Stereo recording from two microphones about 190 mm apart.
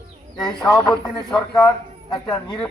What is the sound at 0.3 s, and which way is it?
Speech, 20° left (ahead or behind).